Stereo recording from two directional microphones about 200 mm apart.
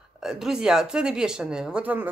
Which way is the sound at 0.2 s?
Centre (ahead or behind).